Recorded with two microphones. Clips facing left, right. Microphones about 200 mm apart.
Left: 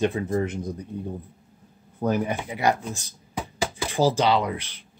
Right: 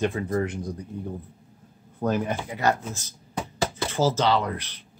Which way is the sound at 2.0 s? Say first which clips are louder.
Left 1 dB; 10° left (ahead or behind).